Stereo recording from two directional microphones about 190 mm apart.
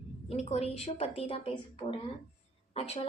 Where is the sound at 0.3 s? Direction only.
35° left (ahead or behind).